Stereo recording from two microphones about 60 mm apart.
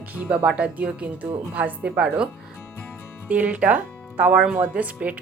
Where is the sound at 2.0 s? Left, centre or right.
Centre.